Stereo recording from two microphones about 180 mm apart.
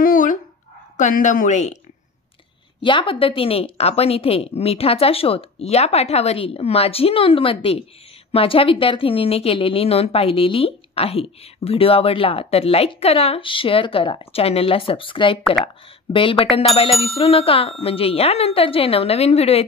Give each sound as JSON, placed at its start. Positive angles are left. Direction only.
{"t": 0.0, "sound": "dog", "side_deg": 50}
{"t": 0.9, "sound": "speech", "side_deg": 45}
{"t": 2.8, "sound": "speech", "side_deg": 30}